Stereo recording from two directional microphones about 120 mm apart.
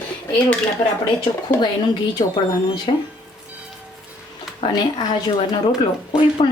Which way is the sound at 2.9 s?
45° left (ahead or behind).